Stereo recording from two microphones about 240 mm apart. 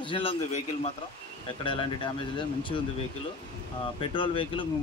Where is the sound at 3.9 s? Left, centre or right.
Left.